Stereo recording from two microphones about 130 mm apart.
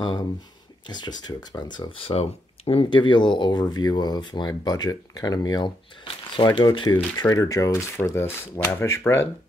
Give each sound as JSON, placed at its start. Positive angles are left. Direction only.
{"t": 0.8, "sound": "speech", "side_deg": 35}